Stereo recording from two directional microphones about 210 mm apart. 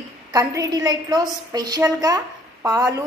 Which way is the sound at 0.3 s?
15° right (ahead or behind).